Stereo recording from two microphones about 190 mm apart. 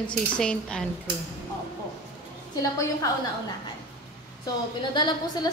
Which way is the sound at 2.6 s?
20° left (ahead or behind).